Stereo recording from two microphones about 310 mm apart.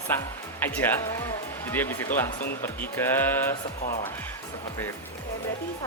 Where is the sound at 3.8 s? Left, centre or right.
Left.